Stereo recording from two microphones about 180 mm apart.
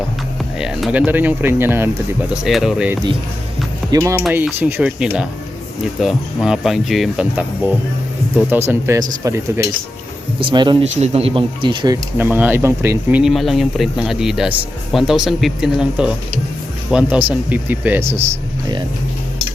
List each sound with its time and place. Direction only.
0.6 s speech: 5° right (ahead or behind)
2.3 s speech: centre (ahead or behind); by 9.4 s 20° right (ahead or behind)
10.4 s speech: 25° right (ahead or behind)
10.9 s speech: 35° right (ahead or behind)
12.1 s speech: 10° right (ahead or behind)